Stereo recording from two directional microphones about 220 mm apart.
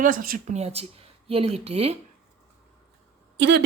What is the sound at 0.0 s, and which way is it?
Speech, 40° right (ahead or behind).